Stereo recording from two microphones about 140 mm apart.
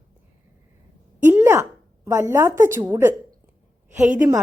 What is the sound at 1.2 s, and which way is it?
A woman's voice, 15° right (ahead or behind).